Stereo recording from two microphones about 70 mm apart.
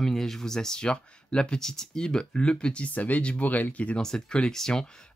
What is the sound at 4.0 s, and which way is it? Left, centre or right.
Speech, centre.